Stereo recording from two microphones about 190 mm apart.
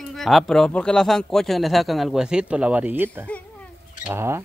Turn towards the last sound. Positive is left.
turn(degrees=-15)  # may be behind; listen again after turning